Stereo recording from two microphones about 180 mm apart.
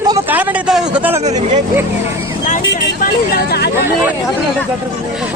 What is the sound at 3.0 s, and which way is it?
Speech, 60° left (ahead or behind).